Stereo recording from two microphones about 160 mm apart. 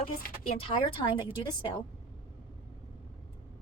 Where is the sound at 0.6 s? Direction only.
35° left (ahead or behind).